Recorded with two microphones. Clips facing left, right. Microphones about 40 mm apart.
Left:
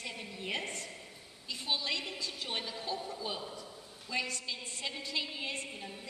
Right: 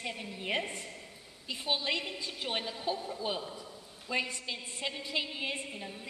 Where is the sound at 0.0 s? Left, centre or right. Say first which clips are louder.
Right 3 dB; centre.